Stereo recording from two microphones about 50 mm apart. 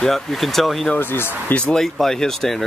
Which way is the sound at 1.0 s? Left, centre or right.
Left.